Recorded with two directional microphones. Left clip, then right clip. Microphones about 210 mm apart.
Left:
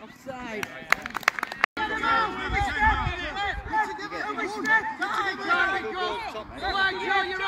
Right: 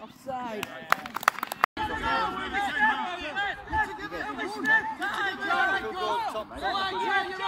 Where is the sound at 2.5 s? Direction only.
5° right (ahead or behind).